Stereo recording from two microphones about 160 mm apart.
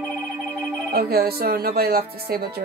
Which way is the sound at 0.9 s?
75° right (ahead or behind).